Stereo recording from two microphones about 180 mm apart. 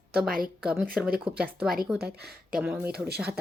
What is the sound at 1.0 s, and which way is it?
A woman's voice, 5° right (ahead or behind).